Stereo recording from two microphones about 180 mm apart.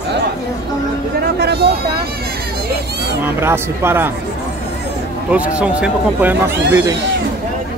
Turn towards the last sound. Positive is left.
turn(degrees=-15)  # may be behind; listen again after turning